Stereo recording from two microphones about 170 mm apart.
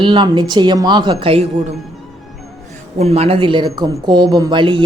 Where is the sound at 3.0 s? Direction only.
35° right (ahead or behind).